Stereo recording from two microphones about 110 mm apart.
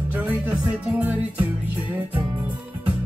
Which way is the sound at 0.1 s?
15° right (ahead or behind).